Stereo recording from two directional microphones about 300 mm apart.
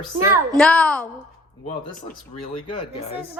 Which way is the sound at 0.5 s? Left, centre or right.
Centre.